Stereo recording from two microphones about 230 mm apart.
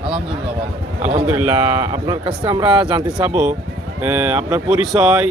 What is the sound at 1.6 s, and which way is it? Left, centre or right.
Speech, right.